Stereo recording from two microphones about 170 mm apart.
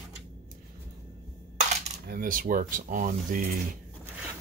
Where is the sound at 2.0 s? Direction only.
55° right (ahead or behind).